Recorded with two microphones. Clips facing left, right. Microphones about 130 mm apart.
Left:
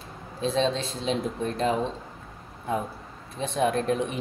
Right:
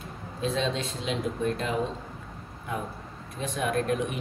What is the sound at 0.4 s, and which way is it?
Speech, 30° left (ahead or behind).